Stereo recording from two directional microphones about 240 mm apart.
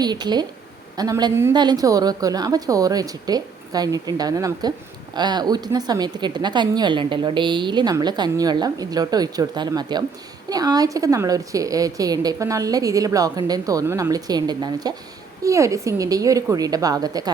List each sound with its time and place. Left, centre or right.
0.0 s a woman's voice: centre